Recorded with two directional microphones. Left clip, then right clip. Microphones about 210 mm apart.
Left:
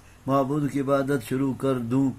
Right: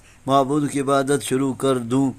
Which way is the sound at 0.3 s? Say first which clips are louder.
Right 6 dB; 35° right (ahead or behind).